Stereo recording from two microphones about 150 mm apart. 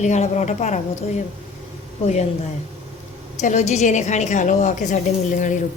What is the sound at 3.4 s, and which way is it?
A woman's voice, 50° left (ahead or behind).